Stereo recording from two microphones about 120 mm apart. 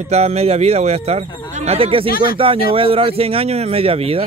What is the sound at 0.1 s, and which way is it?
Speech, 60° right (ahead or behind).